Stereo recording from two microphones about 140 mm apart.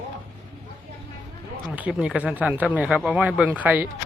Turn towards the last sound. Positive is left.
turn(degrees=-10)  # may be behind; listen again after turning